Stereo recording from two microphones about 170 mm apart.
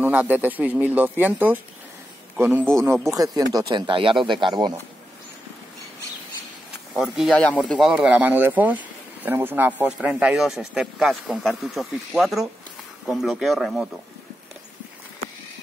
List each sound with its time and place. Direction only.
0.0 s a man's voice: 10° right (ahead or behind); by 4.7 s 25° right (ahead or behind)
6.9 s speech: centre (ahead or behind)